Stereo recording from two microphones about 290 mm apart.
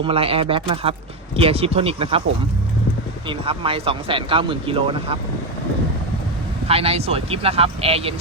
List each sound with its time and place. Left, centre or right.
0.0 s speech: centre
3.2 s speech: centre
6.7 s speech: centre